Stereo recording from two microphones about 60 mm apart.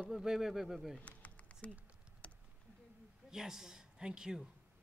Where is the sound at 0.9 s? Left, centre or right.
Left.